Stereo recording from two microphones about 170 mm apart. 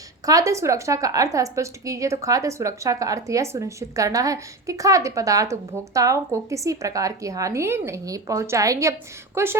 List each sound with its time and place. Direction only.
0.3 s a woman's voice: 20° right (ahead or behind)